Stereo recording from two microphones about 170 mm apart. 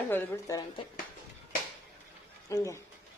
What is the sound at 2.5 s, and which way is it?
Speech, 20° left (ahead or behind).